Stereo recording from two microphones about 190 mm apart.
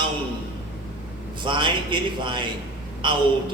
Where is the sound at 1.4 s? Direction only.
25° right (ahead or behind).